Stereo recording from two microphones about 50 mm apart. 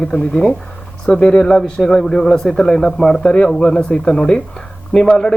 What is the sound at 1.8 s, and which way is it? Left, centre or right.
Speech, centre.